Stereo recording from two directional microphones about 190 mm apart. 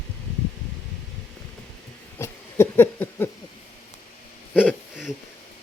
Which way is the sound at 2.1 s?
15° left (ahead or behind).